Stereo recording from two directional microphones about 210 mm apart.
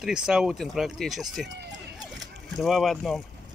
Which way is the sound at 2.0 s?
Centre (ahead or behind).